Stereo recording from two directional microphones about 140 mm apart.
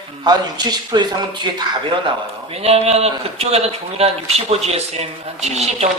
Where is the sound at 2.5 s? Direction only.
45° right (ahead or behind).